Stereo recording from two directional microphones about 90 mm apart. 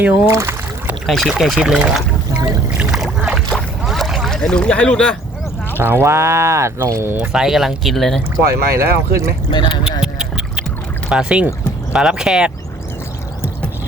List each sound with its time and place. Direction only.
0.0 s speech: 30° right (ahead or behind)
1.0 s speech: centre (ahead or behind)
2.7 s rowboat: 5° right (ahead or behind)
3.8 s boat: centre (ahead or behind)
5.8 s speech: 25° right (ahead or behind)
7.2 s speech: 5° right (ahead or behind)
8.5 s speech: 30° right (ahead or behind)
9.5 s speech: 60° left (ahead or behind)
10.0 s a sound: 5° right (ahead or behind)
11.1 s speech: 10° right (ahead or behind)